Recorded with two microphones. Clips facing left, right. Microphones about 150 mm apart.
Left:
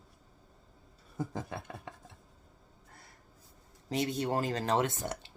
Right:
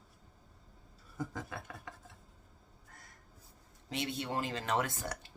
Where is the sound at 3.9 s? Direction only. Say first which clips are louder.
Left 6 dB; 40° left (ahead or behind); by 5.3 s 25° left (ahead or behind).